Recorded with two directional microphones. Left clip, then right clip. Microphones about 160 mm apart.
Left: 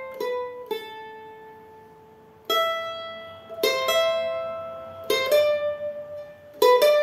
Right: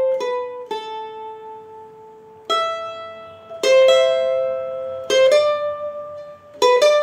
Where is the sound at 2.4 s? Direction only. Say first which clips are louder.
Right 3 dB; 15° right (ahead or behind).